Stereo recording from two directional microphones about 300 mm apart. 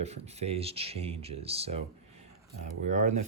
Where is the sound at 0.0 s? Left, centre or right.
Right.